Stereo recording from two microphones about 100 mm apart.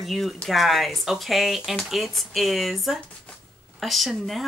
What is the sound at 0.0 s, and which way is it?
Speech, centre (ahead or behind).